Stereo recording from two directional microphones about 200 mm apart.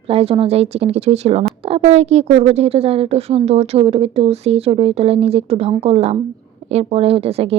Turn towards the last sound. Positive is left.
turn(degrees=-30)  # may be behind; listen again after turning